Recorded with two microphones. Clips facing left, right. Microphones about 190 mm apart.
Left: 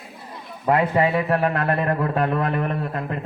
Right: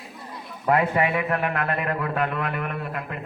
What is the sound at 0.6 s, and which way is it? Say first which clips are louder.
A man's voice: left 2 dB; 30° left (ahead or behind).